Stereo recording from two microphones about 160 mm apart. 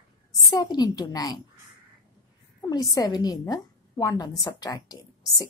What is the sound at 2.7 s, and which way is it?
A woman's voice, 20° left (ahead or behind).